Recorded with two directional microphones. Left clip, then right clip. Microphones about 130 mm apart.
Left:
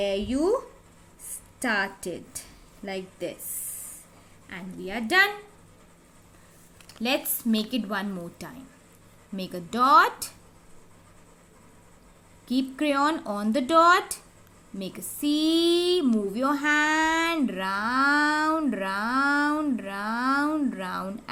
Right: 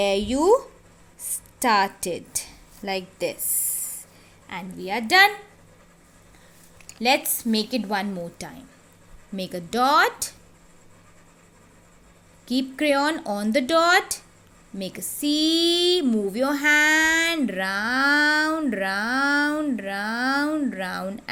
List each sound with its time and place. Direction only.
0.0 s a woman's voice: 55° right (ahead or behind)
4.4 s a woman's voice: 50° right (ahead or behind)
7.0 s a woman's voice: 40° right (ahead or behind)
12.5 s a woman's voice: 40° right (ahead or behind)